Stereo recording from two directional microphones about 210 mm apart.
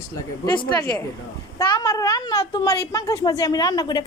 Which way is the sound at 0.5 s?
20° left (ahead or behind).